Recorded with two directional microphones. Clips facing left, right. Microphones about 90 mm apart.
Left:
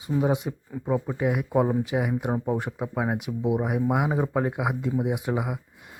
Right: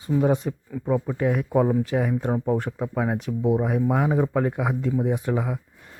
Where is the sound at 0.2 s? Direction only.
10° left (ahead or behind).